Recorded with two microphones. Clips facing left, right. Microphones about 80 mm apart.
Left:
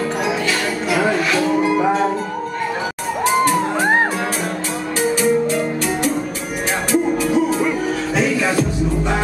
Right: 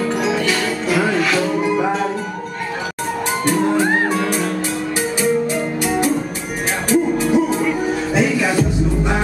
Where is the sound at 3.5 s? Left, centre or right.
Left.